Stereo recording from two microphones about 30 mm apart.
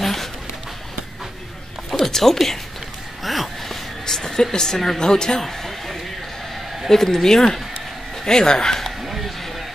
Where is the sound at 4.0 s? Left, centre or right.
Centre.